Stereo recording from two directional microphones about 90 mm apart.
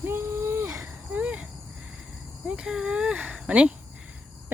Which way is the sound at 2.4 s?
10° right (ahead or behind).